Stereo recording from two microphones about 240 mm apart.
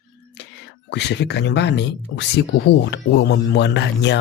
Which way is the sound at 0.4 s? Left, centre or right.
Left.